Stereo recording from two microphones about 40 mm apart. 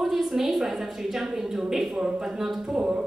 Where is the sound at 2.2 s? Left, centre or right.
Centre.